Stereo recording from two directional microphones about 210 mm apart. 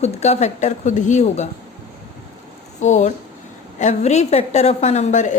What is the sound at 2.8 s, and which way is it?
A woman's voice, 35° left (ahead or behind).